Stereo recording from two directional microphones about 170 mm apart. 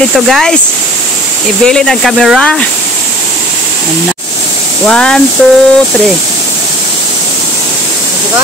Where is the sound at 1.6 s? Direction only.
5° left (ahead or behind).